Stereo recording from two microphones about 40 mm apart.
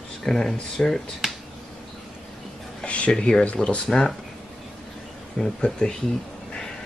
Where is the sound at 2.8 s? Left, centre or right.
Left.